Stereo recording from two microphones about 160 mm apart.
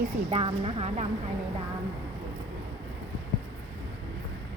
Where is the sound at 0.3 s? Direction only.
35° right (ahead or behind).